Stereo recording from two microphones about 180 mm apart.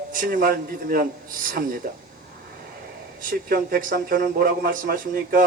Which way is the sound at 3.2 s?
55° right (ahead or behind).